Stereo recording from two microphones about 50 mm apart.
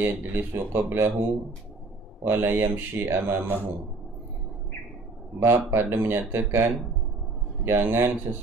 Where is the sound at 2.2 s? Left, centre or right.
Right.